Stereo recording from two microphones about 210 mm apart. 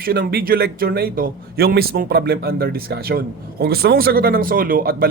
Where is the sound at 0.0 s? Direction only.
45° right (ahead or behind).